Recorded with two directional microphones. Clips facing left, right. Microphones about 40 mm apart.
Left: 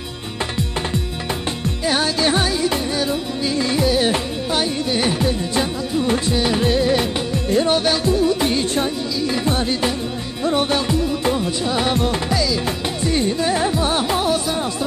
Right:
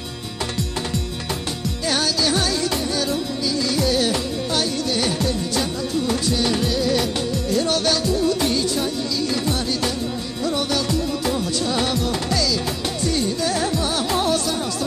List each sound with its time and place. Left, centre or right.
2.0 s music: left
2.4 s music: centre
3.8 s music: centre
6.6 s music: left
11.9 s music: left
12.3 s music: centre
14.1 s music: centre